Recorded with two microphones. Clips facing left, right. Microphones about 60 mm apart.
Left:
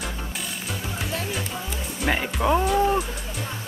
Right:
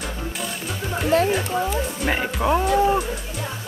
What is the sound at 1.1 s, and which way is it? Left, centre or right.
Speech, right.